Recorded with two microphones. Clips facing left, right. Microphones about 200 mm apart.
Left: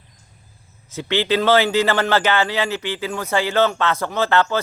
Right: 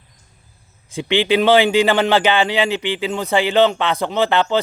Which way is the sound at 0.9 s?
15° right (ahead or behind).